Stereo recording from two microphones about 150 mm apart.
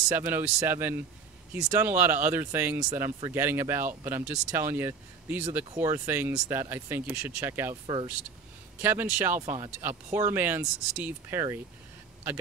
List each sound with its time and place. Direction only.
0.1 s speech: 15° right (ahead or behind)
7.8 s speech: 30° right (ahead or behind)
8.8 s speech: 15° right (ahead or behind)